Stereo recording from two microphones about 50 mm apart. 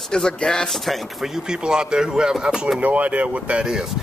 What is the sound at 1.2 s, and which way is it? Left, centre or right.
Speech, centre.